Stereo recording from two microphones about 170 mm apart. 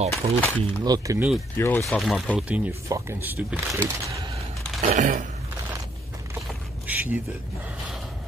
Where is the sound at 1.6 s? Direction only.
15° left (ahead or behind).